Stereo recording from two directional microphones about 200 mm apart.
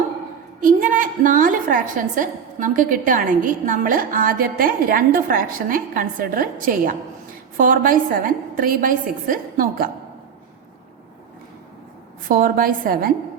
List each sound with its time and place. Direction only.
0.6 s a woman's voice: 40° right (ahead or behind)
12.3 s a woman's voice: 45° right (ahead or behind)